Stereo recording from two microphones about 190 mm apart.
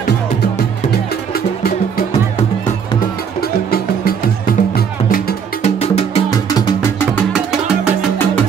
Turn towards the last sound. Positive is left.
turn(degrees=-5)  # may be behind; listen again after turning